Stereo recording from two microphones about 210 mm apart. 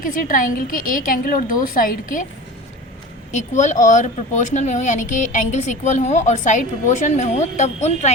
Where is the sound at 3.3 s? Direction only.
35° left (ahead or behind).